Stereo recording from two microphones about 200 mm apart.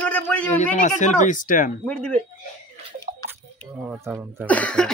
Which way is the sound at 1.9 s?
5° left (ahead or behind).